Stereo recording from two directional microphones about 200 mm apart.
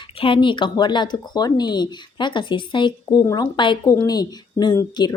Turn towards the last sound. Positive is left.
turn(degrees=20)  # may be behind; listen again after turning